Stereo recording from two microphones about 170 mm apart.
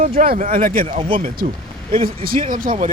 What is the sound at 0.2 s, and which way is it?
Speech, 50° right (ahead or behind).